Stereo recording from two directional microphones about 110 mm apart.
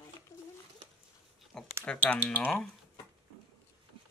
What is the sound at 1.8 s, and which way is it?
Speech, 10° left (ahead or behind).